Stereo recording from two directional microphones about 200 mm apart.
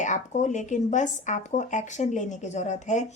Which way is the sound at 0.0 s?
40° left (ahead or behind).